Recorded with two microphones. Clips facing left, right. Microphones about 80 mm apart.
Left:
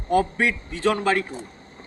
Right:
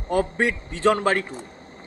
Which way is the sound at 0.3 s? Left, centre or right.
Right.